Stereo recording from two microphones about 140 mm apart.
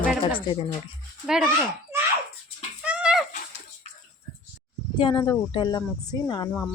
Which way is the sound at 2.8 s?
10° right (ahead or behind).